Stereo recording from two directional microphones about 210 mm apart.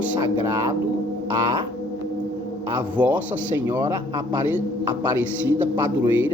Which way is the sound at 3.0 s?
10° right (ahead or behind).